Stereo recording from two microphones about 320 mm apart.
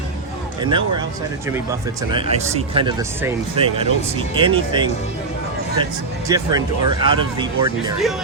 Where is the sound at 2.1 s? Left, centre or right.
Centre.